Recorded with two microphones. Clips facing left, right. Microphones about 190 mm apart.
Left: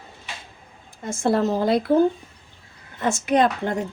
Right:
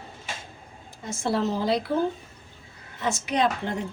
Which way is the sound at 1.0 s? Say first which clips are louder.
Left 5 dB; 50° left (ahead or behind).